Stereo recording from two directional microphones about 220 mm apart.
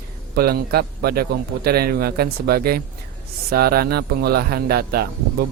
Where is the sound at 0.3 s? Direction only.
45° right (ahead or behind).